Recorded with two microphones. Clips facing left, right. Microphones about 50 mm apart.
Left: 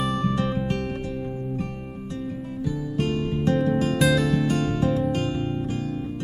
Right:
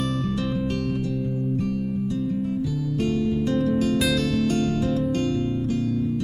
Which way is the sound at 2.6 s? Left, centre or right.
Left.